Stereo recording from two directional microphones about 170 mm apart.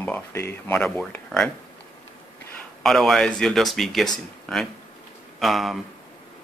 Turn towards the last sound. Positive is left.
turn(degrees=0)  # may be behind; listen again after turning